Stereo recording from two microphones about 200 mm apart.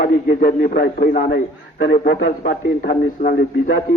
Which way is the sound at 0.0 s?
45° left (ahead or behind).